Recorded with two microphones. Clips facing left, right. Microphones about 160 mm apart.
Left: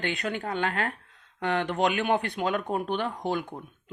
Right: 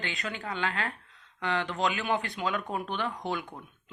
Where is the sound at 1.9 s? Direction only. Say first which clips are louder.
Left 5 dB; 65° left (ahead or behind).